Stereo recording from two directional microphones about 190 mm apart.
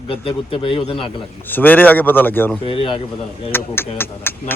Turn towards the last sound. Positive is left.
turn(degrees=10)  # may be behind; listen again after turning